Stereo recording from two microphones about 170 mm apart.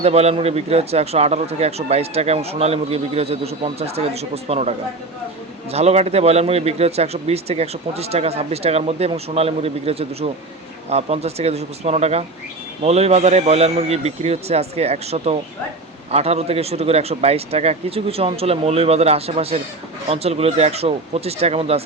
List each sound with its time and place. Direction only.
0.0 s speech: 40° right (ahead or behind)
5.7 s speech: 40° right (ahead or behind)